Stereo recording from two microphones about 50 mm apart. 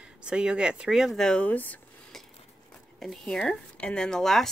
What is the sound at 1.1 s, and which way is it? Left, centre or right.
Speech, centre.